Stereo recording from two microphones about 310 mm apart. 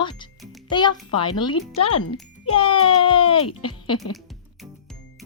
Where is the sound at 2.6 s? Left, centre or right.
Centre.